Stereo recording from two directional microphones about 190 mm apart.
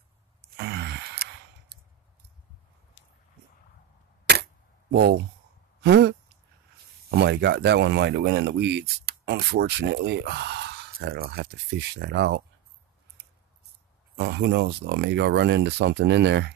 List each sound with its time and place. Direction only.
0.6 s sigh: 60° right (ahead or behind)
4.9 s speech: 60° right (ahead or behind)
5.8 s a sound: 60° right (ahead or behind)
7.1 s speech: 60° right (ahead or behind)
14.1 s speech: 60° right (ahead or behind)